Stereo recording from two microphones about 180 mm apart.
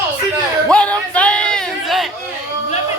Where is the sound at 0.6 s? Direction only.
5° left (ahead or behind).